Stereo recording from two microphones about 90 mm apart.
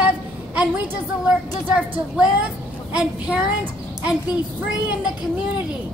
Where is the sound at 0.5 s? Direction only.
15° right (ahead or behind).